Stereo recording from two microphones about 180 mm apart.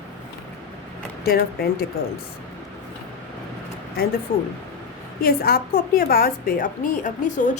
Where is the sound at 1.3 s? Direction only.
60° left (ahead or behind).